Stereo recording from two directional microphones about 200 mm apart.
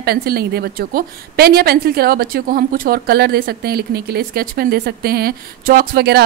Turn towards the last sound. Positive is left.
turn(degrees=-50)  # may be behind; listen again after turning